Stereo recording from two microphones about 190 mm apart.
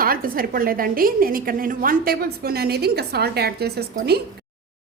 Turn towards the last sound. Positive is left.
turn(degrees=-55)  # may be behind; listen again after turning